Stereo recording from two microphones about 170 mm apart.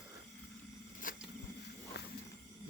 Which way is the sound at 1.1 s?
55° left (ahead or behind).